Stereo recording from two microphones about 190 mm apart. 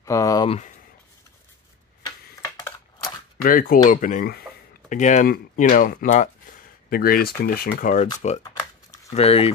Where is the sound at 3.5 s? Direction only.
45° left (ahead or behind).